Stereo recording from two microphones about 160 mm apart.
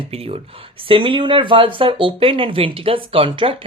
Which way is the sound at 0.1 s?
35° right (ahead or behind).